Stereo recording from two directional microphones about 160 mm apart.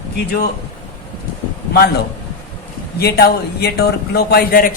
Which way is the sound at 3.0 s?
85° left.